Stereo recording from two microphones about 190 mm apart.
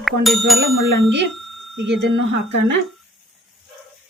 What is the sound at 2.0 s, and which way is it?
Speech, 70° right (ahead or behind).